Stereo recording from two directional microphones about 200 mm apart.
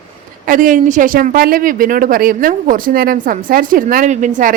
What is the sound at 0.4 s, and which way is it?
Speech, 40° right (ahead or behind).